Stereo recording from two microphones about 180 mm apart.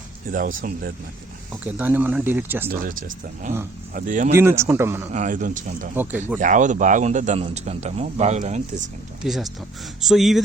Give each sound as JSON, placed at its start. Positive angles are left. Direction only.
{"t": 0.3, "sound": "speech", "side_deg": -50}
{"t": 1.6, "sound": "speech", "side_deg": -10}
{"t": 3.4, "sound": "speech", "side_deg": -45}
{"t": 4.4, "sound": "speech", "side_deg": -15}
{"t": 5.1, "sound": "speech", "side_deg": -45}
{"t": 6.0, "sound": "speech", "side_deg": -10}
{"t": 6.4, "sound": "speech", "side_deg": -45}
{"t": 9.2, "sound": "speech", "side_deg": 0}